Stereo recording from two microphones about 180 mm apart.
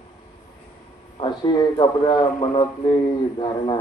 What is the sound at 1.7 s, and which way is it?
Speech, 30° left (ahead or behind).